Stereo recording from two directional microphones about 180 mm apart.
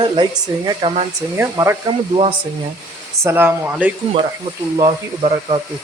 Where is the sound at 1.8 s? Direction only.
30° right (ahead or behind).